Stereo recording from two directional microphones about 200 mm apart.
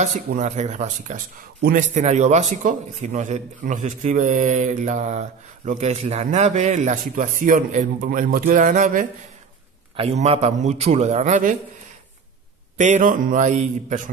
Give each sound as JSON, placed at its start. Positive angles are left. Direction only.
{"t": 0.0, "sound": "a man's voice", "side_deg": -40}
{"t": 9.9, "sound": "a man's voice", "side_deg": -30}
{"t": 12.7, "sound": "a man's voice", "side_deg": -35}